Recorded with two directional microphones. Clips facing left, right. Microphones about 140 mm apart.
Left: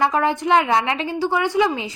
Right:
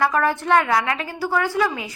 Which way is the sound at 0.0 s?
20° left (ahead or behind).